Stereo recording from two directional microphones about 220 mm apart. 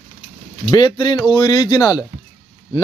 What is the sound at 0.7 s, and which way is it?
Speech, 20° left (ahead or behind).